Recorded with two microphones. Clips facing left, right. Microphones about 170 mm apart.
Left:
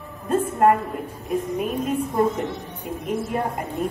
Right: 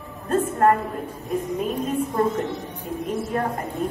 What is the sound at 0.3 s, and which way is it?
Music, 15° left (ahead or behind).